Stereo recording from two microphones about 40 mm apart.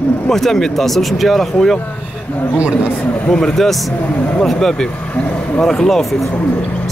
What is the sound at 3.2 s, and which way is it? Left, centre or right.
Speech, left.